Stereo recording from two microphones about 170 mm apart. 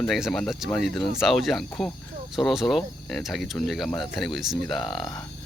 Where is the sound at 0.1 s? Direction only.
Centre (ahead or behind).